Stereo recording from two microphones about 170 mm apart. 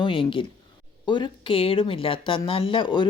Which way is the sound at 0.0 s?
30° left (ahead or behind).